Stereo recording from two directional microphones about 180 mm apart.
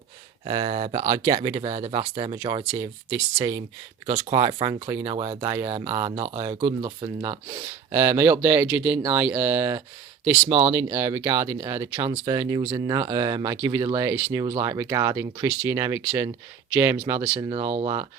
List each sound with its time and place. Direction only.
0.4 s speech: 25° right (ahead or behind)
0.7 s speech: 40° right (ahead or behind)
1.0 s speech: 20° right (ahead or behind)
17.7 s speech: 35° right (ahead or behind)